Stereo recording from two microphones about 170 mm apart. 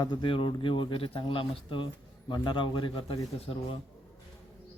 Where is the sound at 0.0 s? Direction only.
25° left (ahead or behind).